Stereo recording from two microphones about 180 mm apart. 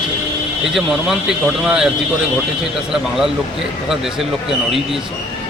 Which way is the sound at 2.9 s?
Centre (ahead or behind).